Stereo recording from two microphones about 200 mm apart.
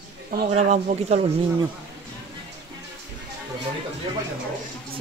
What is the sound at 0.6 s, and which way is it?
Speech, 35° right (ahead or behind).